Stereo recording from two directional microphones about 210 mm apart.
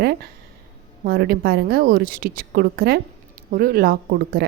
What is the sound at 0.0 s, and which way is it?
A woman's voice, 50° right (ahead or behind).